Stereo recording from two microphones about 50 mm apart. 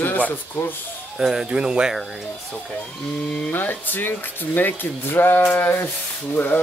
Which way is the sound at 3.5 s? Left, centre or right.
Left.